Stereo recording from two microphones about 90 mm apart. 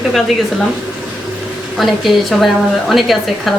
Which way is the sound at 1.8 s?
Centre (ahead or behind).